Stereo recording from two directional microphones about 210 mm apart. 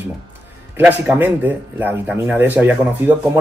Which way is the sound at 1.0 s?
10° right (ahead or behind).